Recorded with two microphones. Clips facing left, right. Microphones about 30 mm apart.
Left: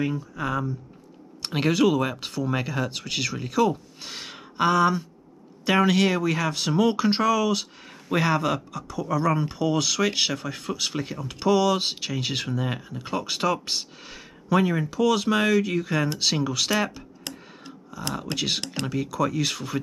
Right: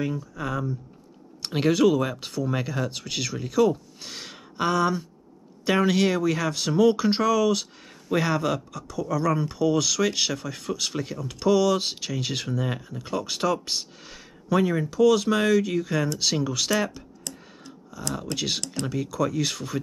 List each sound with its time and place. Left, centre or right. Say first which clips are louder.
0.0 s speech: left 2 dB; centre
18.1 s speech: left 1 dB; centre
18.6 s speech: left 1 dB; left
18.9 s speech: left 1 dB; centre